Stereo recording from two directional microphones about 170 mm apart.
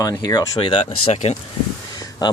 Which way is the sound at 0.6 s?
35° left (ahead or behind).